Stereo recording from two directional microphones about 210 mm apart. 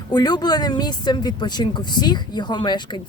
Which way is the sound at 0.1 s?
20° left (ahead or behind).